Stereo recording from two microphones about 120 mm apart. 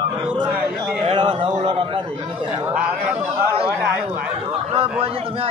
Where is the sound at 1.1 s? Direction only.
40° right (ahead or behind).